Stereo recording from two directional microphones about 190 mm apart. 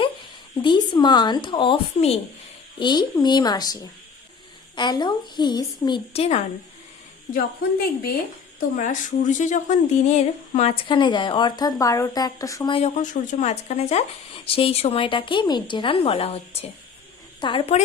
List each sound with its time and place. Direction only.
0.6 s a woman's voice: 25° left (ahead or behind)
7.3 s a woman's voice: 50° left (ahead or behind); by 12.7 s 15° left (ahead or behind)
12.7 s a woman's voice: 35° left (ahead or behind)